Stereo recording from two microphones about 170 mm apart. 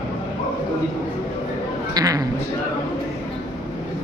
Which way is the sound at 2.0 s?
20° right (ahead or behind).